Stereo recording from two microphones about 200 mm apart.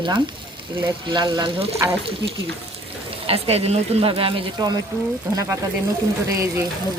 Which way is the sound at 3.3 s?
30° right (ahead or behind).